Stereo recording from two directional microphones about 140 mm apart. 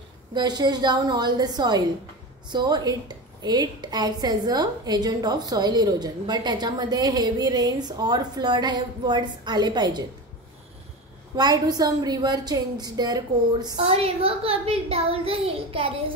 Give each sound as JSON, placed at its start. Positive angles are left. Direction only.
{"t": 0.3, "sound": "a woman's voice", "side_deg": -30}
{"t": 11.3, "sound": "a woman's voice", "side_deg": -30}
{"t": 13.7, "sound": "a child's voice", "side_deg": -50}